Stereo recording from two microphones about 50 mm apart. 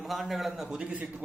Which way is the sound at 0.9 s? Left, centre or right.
Right.